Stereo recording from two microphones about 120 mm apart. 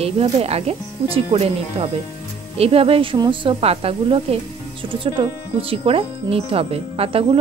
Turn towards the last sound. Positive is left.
turn(degrees=-55)  # may be behind; listen again after turning